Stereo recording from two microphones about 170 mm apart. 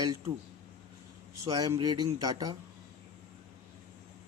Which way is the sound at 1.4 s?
20° right (ahead or behind).